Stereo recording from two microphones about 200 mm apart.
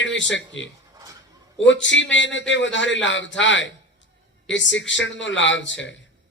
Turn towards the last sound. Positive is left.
turn(degrees=65)  # may be behind; listen again after turning